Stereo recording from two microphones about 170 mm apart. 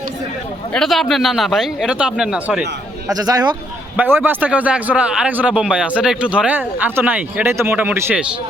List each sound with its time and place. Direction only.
0.7 s a man's voice: centre (ahead or behind)
3.1 s a man's voice: 20° right (ahead or behind)
3.9 s a man's voice: 10° right (ahead or behind)